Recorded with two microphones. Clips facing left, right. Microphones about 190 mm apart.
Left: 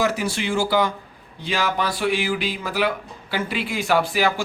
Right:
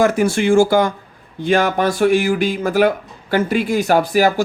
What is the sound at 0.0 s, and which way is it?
Speech, 50° right (ahead or behind).